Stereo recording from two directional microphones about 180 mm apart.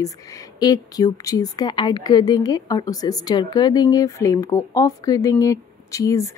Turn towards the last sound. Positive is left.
turn(degrees=20)  # may be behind; listen again after turning